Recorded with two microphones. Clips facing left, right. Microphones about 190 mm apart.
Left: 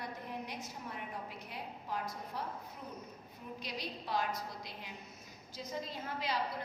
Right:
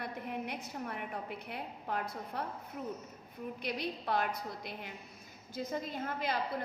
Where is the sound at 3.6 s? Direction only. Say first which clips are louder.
Right 6 dB; 55° right (ahead or behind).